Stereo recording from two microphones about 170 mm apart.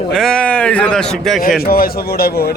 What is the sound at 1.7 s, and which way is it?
Speech, 60° left (ahead or behind).